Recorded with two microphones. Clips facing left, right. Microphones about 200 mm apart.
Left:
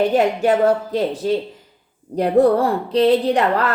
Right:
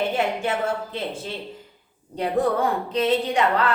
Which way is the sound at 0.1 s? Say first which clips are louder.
Left 8 dB; 40° left (ahead or behind).